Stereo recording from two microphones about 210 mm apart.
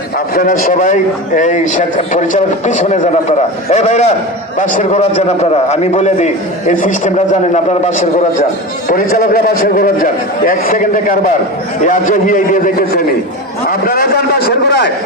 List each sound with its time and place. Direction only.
0.3 s a man's voice: 40° left (ahead or behind)
8.9 s a man's voice: 45° left (ahead or behind)